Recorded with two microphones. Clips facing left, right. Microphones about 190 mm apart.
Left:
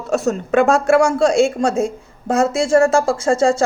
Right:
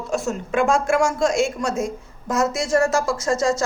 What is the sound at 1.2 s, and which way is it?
Speech, 30° left (ahead or behind).